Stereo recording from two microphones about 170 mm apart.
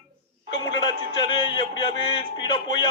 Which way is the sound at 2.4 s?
25° left (ahead or behind).